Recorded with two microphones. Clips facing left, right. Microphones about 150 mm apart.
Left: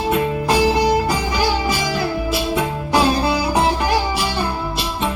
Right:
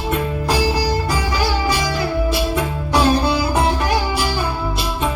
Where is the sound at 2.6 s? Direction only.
Centre (ahead or behind).